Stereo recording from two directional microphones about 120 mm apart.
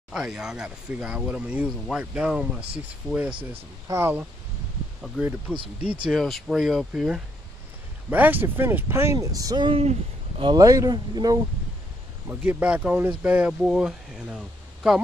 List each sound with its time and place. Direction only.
0.1 s speech: 5° right (ahead or behind)
3.8 s speech: 25° right (ahead or behind)
5.0 s speech: centre (ahead or behind); by 11.4 s 35° right (ahead or behind)
12.3 s speech: 15° right (ahead or behind)